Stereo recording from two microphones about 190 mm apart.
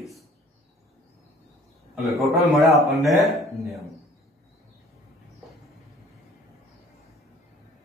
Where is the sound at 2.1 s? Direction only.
Centre (ahead or behind).